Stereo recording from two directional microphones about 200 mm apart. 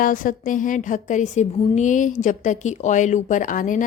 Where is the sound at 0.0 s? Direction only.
45° left (ahead or behind).